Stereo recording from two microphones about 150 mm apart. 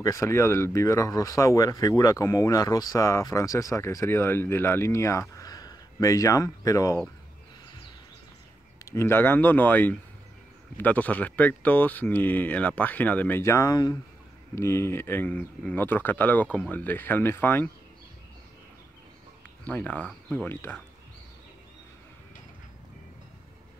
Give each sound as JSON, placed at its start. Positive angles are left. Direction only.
{"t": 0.0, "sound": "speech", "side_deg": 20}
{"t": 8.9, "sound": "speech", "side_deg": 15}
{"t": 19.6, "sound": "speech", "side_deg": 10}